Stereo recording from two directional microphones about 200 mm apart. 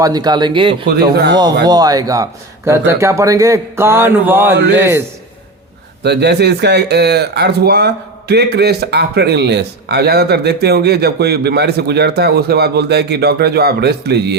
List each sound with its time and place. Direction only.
0.0 s speech: 20° right (ahead or behind)
1.1 s speech: 55° right (ahead or behind)
1.6 s a man's voice: 20° right (ahead or behind)
6.0 s speech: 55° right (ahead or behind)